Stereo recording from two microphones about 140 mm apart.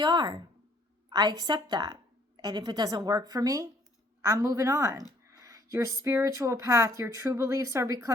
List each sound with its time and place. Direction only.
0.0 s speech: 30° right (ahead or behind)